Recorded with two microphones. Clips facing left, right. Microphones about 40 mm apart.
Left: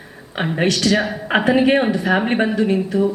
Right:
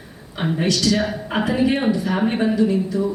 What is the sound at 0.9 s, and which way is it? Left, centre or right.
Speech, centre.